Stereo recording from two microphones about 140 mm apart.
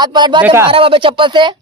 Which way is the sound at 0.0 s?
30° right (ahead or behind).